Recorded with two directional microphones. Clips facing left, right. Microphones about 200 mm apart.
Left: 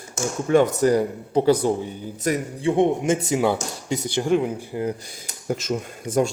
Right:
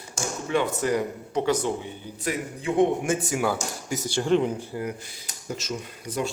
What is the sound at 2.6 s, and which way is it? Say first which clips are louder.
A man's voice: left 2 dB; 25° left (ahead or behind).